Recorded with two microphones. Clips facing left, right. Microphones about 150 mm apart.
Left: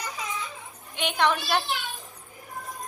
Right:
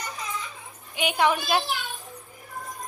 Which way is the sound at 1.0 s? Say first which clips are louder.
Right 2 dB; 10° right (ahead or behind).